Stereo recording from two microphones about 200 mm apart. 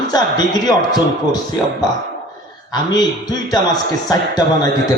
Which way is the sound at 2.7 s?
20° left (ahead or behind).